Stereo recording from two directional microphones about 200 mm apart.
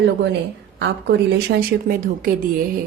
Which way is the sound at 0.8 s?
55° right (ahead or behind).